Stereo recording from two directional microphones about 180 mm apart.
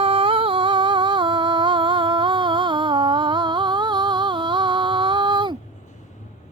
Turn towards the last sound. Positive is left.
turn(degrees=-25)  # may be behind; listen again after turning